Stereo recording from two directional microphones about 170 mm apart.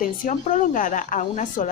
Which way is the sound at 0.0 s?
55° left (ahead or behind).